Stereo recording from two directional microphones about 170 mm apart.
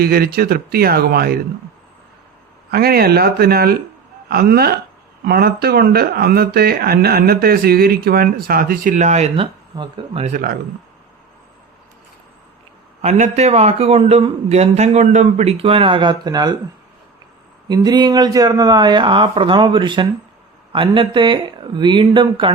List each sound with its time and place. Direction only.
0.0 s speech: 65° right (ahead or behind)
2.6 s speech: 65° right (ahead or behind); by 10.2 s 30° right (ahead or behind)
10.2 s speech: 55° right (ahead or behind)
13.0 s a man's voice: 40° right (ahead or behind); by 16.6 s 25° right (ahead or behind)
17.7 s speech: 25° right (ahead or behind)